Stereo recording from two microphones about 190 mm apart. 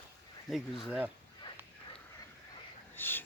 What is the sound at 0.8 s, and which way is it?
Speech, 5° right (ahead or behind).